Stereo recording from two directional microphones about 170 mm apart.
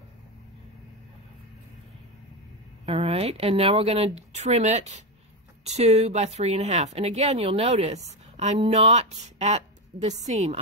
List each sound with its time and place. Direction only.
2.8 s a woman's voice: 35° right (ahead or behind)